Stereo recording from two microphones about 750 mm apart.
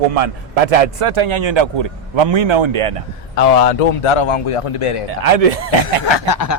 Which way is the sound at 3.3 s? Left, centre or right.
Left.